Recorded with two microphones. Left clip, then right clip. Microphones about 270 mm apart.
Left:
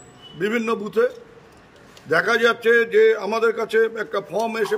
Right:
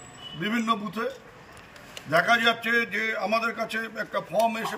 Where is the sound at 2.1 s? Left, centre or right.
Centre.